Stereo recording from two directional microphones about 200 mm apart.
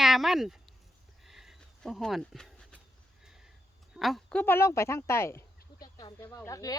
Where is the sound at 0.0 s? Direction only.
Centre (ahead or behind).